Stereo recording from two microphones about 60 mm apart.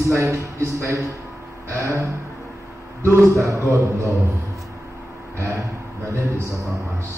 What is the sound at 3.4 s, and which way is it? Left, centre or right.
Speech, right.